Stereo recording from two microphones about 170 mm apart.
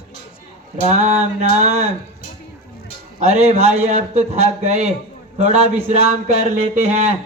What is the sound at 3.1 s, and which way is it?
A man's voice, 40° right (ahead or behind).